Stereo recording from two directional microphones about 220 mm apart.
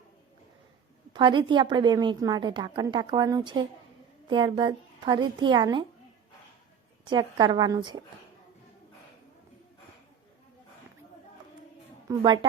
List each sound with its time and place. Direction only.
1.1 s a woman's voice: 20° right (ahead or behind)
7.0 s a woman's voice: 20° right (ahead or behind)
12.0 s a woman's voice: 20° right (ahead or behind)